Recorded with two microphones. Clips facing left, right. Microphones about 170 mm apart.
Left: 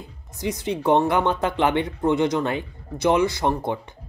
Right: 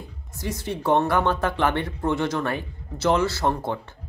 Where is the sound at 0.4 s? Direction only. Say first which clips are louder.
Left 4 dB; 20° left (ahead or behind).